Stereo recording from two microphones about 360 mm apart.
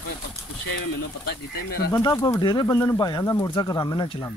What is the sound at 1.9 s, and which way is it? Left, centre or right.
Speech, centre.